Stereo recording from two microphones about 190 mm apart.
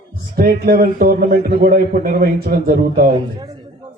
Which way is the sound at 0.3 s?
50° right (ahead or behind).